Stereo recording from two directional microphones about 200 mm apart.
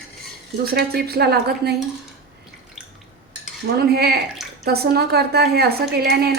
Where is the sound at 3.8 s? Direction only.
50° right (ahead or behind).